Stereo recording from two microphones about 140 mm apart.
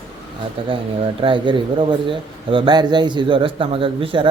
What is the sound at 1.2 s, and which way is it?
Speech, 35° right (ahead or behind).